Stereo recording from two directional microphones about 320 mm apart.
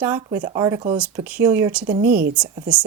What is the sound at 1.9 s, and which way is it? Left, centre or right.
Speech, right.